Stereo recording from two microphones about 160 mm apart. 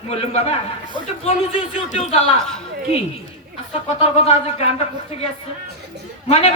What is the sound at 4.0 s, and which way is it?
Speech, 40° left (ahead or behind).